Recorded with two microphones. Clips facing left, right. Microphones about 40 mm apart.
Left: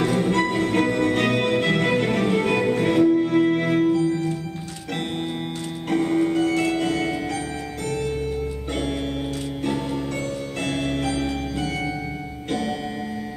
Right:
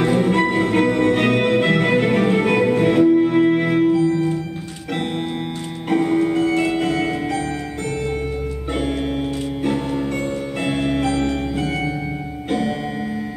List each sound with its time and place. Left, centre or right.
0.0 s music: centre
5.9 s music: centre
10.6 s music: centre